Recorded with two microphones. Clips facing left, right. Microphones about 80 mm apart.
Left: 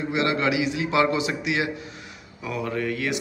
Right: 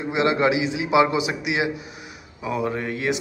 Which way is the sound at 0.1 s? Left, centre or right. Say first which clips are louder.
Right 4 dB; right.